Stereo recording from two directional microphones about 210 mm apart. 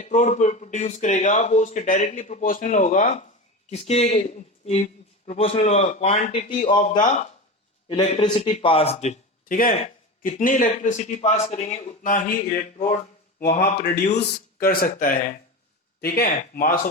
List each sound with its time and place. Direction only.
0.0 s a man's voice: 35° left (ahead or behind)
7.9 s a man's voice: 25° left (ahead or behind); by 16.9 s 40° left (ahead or behind)